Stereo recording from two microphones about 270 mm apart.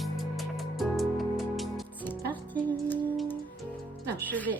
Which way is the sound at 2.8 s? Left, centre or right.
Centre.